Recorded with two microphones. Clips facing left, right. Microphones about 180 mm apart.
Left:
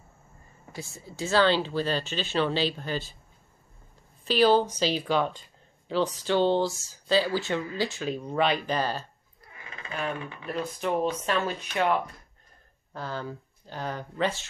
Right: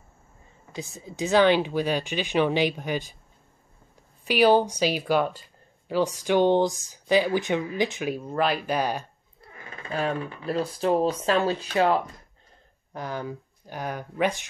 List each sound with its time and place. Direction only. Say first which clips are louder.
0.7 s speech: right 4 dB; 20° right (ahead or behind)
4.2 s speech: right 2 dB; 15° right (ahead or behind)
9.7 s speech: right 5 dB; 35° right (ahead or behind)
12.9 s speech: right 2 dB; 15° right (ahead or behind)